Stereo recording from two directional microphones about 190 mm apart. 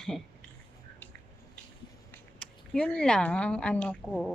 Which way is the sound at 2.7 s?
5° left (ahead or behind).